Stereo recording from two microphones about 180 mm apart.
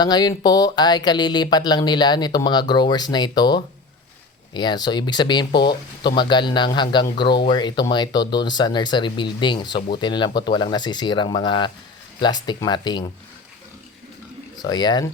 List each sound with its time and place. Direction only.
0.0 s speech: 20° left (ahead or behind)
14.6 s speech: 25° left (ahead or behind)